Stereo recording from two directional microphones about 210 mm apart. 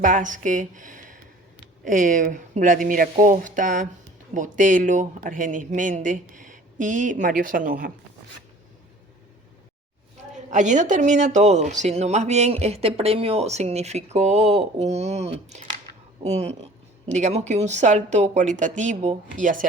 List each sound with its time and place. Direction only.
0.0 s speech: 40° right (ahead or behind)
10.3 s speech: 35° right (ahead or behind)